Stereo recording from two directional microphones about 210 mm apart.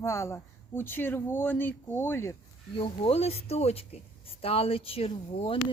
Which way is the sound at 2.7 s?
25° left (ahead or behind).